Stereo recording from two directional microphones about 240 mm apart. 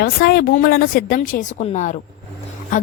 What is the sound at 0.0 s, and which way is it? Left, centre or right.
A woman's voice, left.